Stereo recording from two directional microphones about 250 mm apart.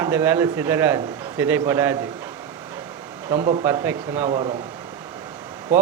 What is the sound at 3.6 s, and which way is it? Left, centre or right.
Speech, centre.